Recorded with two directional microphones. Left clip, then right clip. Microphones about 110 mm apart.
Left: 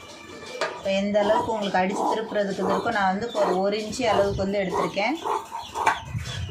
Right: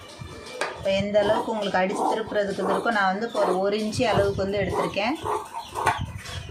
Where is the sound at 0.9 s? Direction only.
25° right (ahead or behind); by 5.1 s 40° right (ahead or behind).